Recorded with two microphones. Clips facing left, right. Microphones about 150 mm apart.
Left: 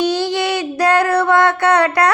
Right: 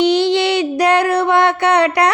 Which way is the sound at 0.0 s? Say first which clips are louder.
Right 4 dB; 20° right (ahead or behind).